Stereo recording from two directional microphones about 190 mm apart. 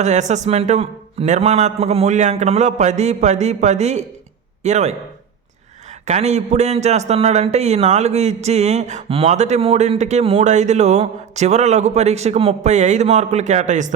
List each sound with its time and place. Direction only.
0.0 s a man's voice: 40° right (ahead or behind)
6.1 s a man's voice: 35° right (ahead or behind)